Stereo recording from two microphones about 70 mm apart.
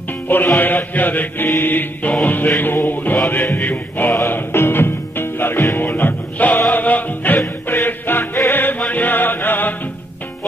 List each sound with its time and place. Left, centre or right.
0.6 s music: left
8.8 s chant: left